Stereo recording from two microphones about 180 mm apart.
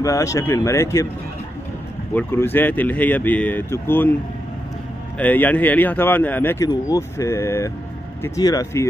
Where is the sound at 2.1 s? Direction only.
10° left (ahead or behind).